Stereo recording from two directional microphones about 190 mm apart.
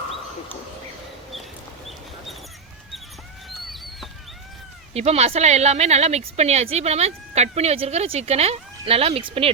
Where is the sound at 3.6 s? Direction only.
Centre (ahead or behind).